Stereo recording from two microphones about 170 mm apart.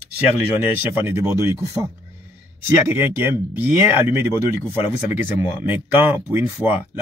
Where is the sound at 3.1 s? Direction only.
10° right (ahead or behind).